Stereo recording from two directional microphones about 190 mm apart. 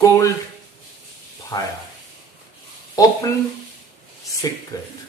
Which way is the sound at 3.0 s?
20° left (ahead or behind).